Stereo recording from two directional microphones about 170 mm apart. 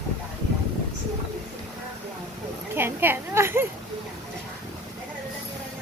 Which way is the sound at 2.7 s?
10° right (ahead or behind).